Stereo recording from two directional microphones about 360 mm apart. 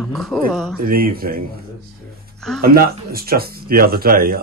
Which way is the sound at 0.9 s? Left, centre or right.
Right.